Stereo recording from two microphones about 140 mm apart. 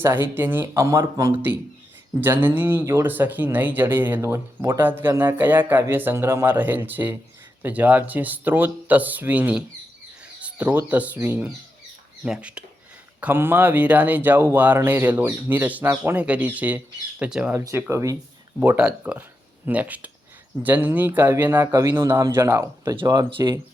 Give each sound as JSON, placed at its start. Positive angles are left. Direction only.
{"t": 0.0, "sound": "speech", "side_deg": -15}
{"t": 17.5, "sound": "speech", "side_deg": -20}
{"t": 18.6, "sound": "speech", "side_deg": -10}